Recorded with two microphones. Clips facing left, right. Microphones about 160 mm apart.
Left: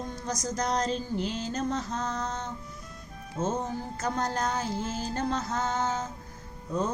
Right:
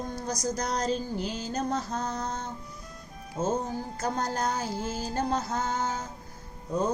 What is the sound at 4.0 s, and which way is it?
Music, 35° right (ahead or behind).